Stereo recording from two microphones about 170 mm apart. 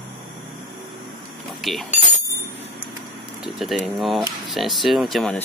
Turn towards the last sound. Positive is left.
turn(degrees=0)  # may be behind; listen again after turning